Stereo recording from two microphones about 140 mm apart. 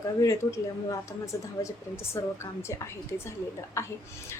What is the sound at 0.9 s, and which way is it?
Speech, 20° left (ahead or behind).